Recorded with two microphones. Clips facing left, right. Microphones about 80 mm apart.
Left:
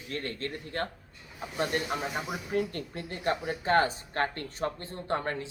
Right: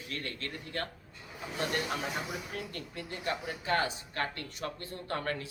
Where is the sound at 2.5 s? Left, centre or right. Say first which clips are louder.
Left 9 dB; left.